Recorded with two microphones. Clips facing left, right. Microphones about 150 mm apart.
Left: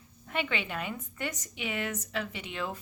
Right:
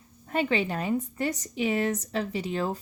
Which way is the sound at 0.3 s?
40° right (ahead or behind).